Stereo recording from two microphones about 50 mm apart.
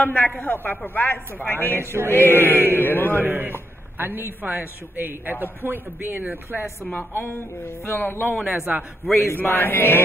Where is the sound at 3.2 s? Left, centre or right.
Right.